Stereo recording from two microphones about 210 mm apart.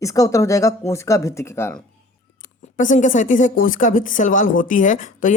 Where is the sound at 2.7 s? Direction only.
35° left (ahead or behind).